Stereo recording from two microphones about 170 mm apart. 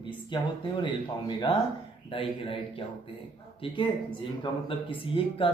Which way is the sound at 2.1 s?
30° left (ahead or behind).